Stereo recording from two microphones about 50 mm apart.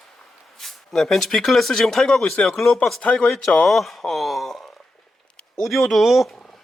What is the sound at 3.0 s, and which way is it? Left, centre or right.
Speech, left.